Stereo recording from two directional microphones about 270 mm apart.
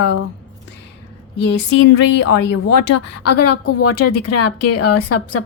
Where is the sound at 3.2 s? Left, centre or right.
Left.